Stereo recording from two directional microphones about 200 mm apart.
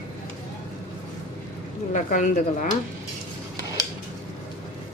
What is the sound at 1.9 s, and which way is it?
Speech, 40° left (ahead or behind).